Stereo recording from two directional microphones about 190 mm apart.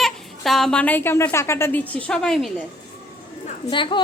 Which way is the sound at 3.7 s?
25° left (ahead or behind).